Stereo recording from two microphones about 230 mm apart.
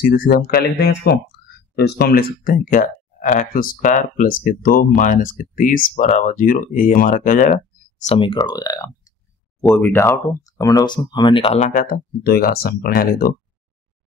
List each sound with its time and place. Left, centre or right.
0.0 s speech: left